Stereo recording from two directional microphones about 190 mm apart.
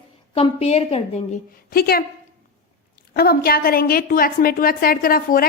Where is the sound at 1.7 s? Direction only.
50° left (ahead or behind).